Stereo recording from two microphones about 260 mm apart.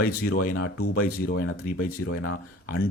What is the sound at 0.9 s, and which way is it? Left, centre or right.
Speech, left.